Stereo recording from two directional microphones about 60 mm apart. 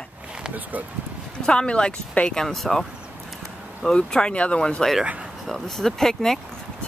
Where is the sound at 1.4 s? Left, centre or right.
Centre.